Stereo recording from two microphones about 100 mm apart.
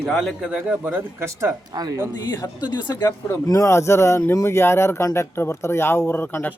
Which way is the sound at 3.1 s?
25° left (ahead or behind).